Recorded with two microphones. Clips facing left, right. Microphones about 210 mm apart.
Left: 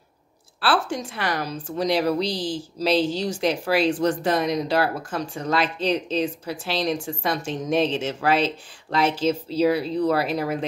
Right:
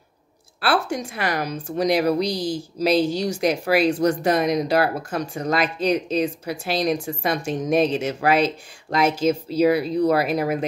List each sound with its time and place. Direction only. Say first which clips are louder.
0.8 s speech: right 2 dB; 10° right (ahead or behind)
8.9 s speech: right 2 dB; 45° right (ahead or behind)
9.2 s speech: right 3 dB; 10° right (ahead or behind)